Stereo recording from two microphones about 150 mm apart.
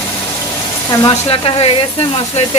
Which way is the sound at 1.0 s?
35° left (ahead or behind).